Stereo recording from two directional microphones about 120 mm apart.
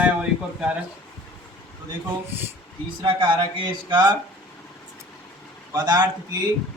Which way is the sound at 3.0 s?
40° right (ahead or behind).